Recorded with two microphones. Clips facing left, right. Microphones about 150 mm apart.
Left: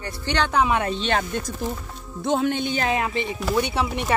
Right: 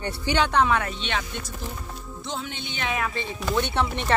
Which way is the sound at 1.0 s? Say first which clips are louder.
Left 6 dB; 45° left (ahead or behind).